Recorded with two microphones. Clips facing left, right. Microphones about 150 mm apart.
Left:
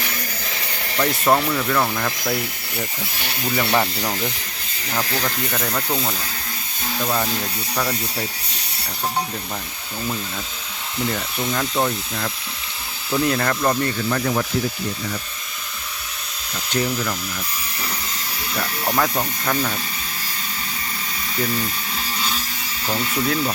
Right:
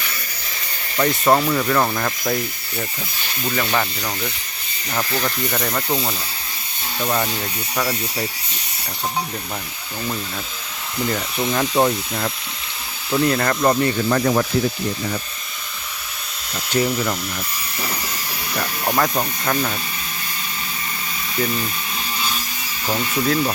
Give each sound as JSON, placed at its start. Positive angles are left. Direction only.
{"t": 0.9, "sound": "speech", "side_deg": -5}
{"t": 2.2, "sound": "speech", "side_deg": 10}
{"t": 11.4, "sound": "speech", "side_deg": -20}
{"t": 13.2, "sound": "speech", "side_deg": 0}
{"t": 13.6, "sound": "speech", "side_deg": -15}
{"t": 14.1, "sound": "speech", "side_deg": -55}
{"t": 16.7, "sound": "speech", "side_deg": -15}
{"t": 18.9, "sound": "speech", "side_deg": -5}
{"t": 22.9, "sound": "speech", "side_deg": -5}